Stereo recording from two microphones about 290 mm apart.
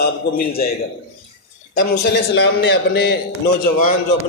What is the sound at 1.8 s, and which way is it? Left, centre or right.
A man's voice, left.